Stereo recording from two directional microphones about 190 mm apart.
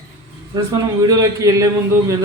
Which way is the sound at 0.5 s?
20° right (ahead or behind).